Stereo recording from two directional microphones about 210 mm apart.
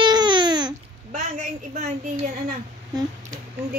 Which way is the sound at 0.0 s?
20° right (ahead or behind).